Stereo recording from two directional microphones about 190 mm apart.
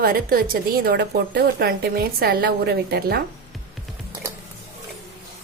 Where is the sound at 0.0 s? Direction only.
50° right (ahead or behind).